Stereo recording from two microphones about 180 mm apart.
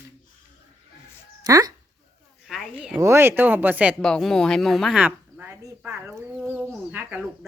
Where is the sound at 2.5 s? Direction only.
5° right (ahead or behind).